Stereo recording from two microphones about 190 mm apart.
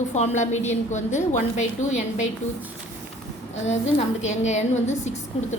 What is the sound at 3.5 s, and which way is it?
A woman's voice, 35° left (ahead or behind).